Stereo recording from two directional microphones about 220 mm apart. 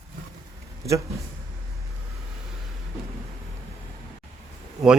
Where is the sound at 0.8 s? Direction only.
15° right (ahead or behind).